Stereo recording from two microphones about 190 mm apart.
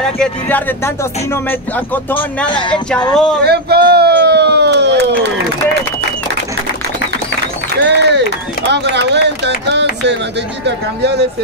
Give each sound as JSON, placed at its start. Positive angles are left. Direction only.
{"t": 0.2, "sound": "music", "side_deg": 10}
{"t": 2.1, "sound": "a man's voice", "side_deg": 25}
{"t": 3.4, "sound": "speech", "side_deg": -55}
{"t": 7.7, "sound": "speech", "side_deg": -60}